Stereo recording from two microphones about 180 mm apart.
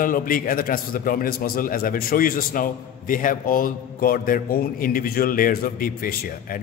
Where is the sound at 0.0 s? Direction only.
50° left (ahead or behind).